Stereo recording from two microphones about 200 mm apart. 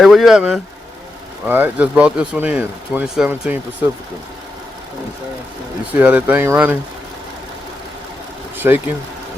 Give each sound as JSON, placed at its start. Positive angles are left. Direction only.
{"t": 0.0, "sound": "speech", "side_deg": 0}
{"t": 5.9, "sound": "speech", "side_deg": -10}
{"t": 8.5, "sound": "a sound", "side_deg": -10}